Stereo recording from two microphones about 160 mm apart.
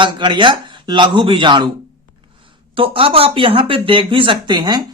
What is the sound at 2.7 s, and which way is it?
Speech, 35° right (ahead or behind).